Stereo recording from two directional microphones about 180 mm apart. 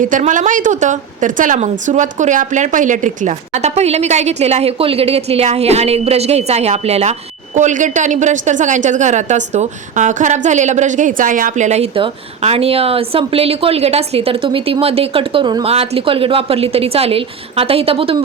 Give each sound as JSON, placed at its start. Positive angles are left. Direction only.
{"t": 0.0, "sound": "a woman's voice", "side_deg": -45}